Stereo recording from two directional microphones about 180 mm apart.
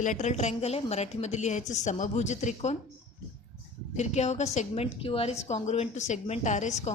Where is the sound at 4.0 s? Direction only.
40° left (ahead or behind).